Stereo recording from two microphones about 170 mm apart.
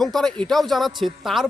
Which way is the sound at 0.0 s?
Centre (ahead or behind).